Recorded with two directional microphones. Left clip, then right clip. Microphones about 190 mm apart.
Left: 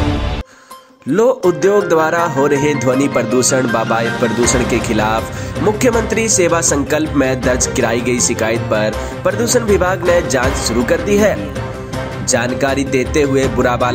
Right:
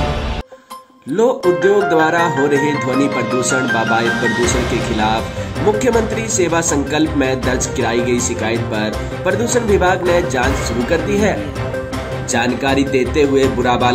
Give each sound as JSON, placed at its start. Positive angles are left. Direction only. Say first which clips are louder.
{"t": 1.1, "sound": "speech", "louder": "left 1 dB", "side_deg": 30}
{"t": 5.8, "sound": "speech", "louder": "left 2 dB", "side_deg": 30}